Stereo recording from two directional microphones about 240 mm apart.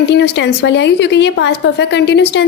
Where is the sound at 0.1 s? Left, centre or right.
Left.